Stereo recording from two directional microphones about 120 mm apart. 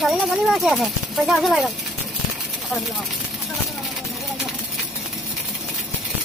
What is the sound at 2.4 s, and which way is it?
Vehicle, centre (ahead or behind).